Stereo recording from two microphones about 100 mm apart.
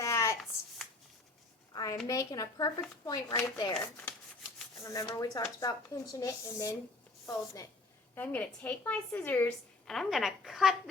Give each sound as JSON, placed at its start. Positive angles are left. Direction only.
{"t": 0.0, "sound": "a sound", "side_deg": 30}
{"t": 1.7, "sound": "a sound", "side_deg": 40}
{"t": 2.0, "sound": "speech", "side_deg": 35}
{"t": 3.8, "sound": "a woman's voice", "side_deg": 15}
{"t": 4.8, "sound": "speech", "side_deg": 35}
{"t": 8.1, "sound": "a woman's voice", "side_deg": 20}
{"t": 9.8, "sound": "a woman's voice", "side_deg": 5}